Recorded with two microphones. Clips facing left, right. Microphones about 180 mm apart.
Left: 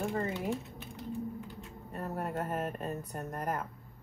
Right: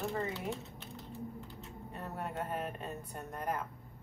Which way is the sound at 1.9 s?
40° left (ahead or behind).